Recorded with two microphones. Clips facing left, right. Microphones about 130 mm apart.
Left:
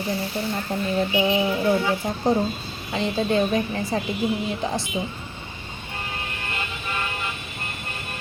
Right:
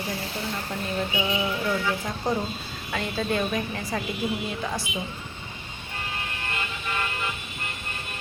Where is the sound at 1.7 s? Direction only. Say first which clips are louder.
Left 5 dB; 35° left (ahead or behind).